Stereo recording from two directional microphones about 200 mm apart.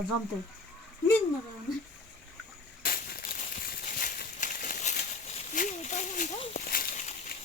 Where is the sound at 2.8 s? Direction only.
50° left (ahead or behind).